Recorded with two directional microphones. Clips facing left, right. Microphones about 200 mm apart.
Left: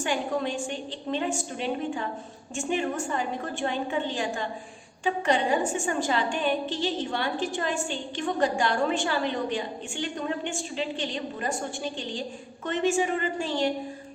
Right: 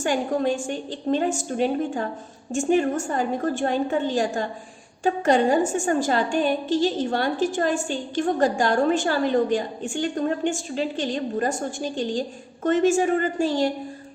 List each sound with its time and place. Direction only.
0.0 s a woman's voice: 45° right (ahead or behind)